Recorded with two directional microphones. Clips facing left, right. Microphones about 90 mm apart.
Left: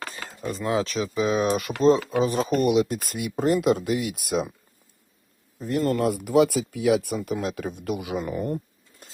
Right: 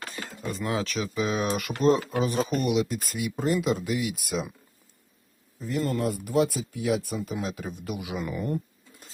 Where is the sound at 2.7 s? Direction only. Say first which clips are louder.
Left 4 dB; 50° left (ahead or behind).